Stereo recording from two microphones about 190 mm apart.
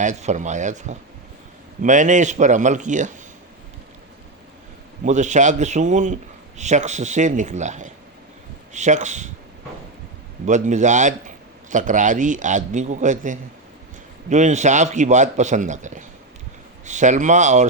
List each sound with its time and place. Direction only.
0.0 s a man's voice: 40° right (ahead or behind)
5.0 s a man's voice: 40° right (ahead or behind)
10.4 s a man's voice: 40° right (ahead or behind)